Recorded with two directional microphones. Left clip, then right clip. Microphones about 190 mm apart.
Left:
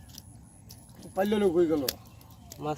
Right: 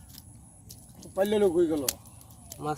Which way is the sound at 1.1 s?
50° left (ahead or behind).